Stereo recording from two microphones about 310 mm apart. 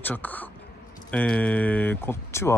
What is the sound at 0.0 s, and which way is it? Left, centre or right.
Speech, centre.